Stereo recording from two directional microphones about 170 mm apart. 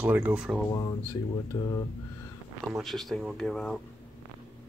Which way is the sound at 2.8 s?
Centre (ahead or behind).